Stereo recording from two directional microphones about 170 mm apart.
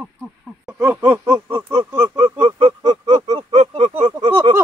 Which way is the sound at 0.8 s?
10° right (ahead or behind).